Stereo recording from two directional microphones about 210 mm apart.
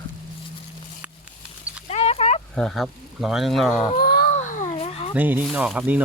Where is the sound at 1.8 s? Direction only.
30° left (ahead or behind).